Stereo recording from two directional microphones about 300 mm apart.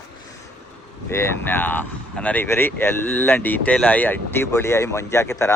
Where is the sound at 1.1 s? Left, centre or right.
Centre.